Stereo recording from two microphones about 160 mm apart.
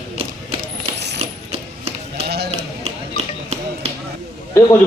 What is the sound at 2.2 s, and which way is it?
Run, 90° right.